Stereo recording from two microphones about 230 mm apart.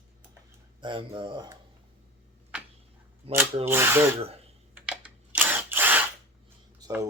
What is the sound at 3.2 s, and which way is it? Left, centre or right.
Speech, right.